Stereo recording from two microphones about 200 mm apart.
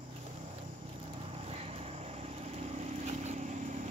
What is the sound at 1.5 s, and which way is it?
Vehicle, 30° right (ahead or behind).